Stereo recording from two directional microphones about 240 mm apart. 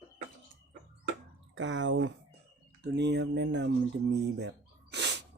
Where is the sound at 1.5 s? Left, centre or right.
Right.